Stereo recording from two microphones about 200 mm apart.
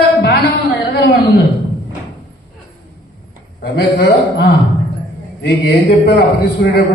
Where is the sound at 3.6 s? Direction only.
50° left (ahead or behind).